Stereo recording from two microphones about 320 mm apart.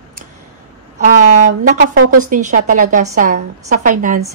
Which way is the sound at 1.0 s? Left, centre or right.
Right.